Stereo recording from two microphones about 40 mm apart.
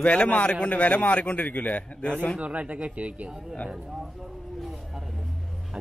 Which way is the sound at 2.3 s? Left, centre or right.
Right.